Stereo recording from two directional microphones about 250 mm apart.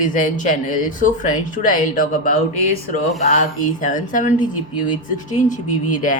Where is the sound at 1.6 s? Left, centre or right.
Left.